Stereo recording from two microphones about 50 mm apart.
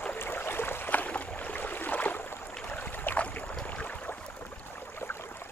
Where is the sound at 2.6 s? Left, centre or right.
Left.